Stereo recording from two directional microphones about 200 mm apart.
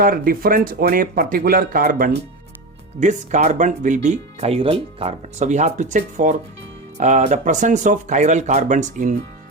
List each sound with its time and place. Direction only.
0.0 s speech: 45° right (ahead or behind)